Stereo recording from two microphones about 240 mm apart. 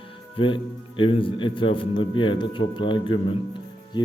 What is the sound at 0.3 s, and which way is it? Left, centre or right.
A man's voice, left.